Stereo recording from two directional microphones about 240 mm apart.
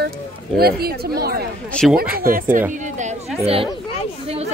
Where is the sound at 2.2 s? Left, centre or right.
Right.